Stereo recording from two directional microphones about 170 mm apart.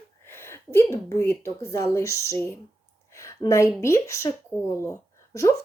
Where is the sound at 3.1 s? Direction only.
20° left (ahead or behind).